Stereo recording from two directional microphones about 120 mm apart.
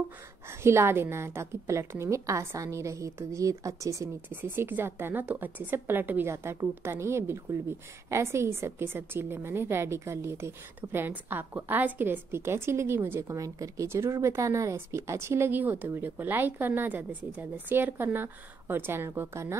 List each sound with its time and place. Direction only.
0.5 s a woman's voice: 20° right (ahead or behind)